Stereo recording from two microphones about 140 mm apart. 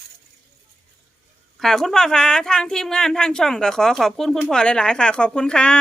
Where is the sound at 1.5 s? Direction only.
Centre (ahead or behind).